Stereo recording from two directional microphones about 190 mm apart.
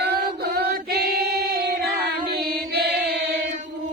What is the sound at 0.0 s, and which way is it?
Female singing, 55° right (ahead or behind).